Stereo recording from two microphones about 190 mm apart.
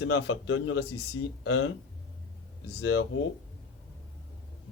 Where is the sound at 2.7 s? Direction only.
70° left (ahead or behind).